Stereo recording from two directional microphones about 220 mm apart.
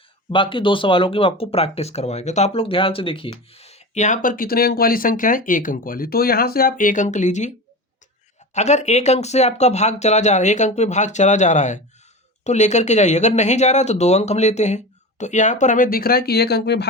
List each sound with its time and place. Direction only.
0.3 s speech: 20° left (ahead or behind)
8.5 s speech: 30° left (ahead or behind); by 16.9 s 50° left (ahead or behind)